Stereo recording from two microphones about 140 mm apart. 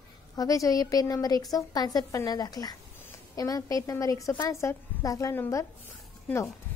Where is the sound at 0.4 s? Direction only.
25° left (ahead or behind).